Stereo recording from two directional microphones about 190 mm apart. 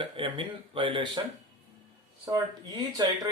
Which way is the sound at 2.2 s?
20° right (ahead or behind).